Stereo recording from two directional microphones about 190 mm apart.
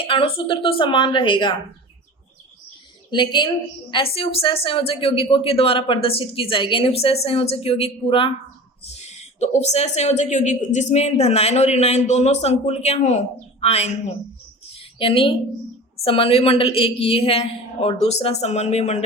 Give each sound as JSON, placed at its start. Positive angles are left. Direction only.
{"t": 0.0, "sound": "a woman's voice", "side_deg": 30}
{"t": 3.1, "sound": "a woman's voice", "side_deg": 25}
{"t": 14.8, "sound": "a sound", "side_deg": 30}
{"t": 16.0, "sound": "a woman's voice", "side_deg": 30}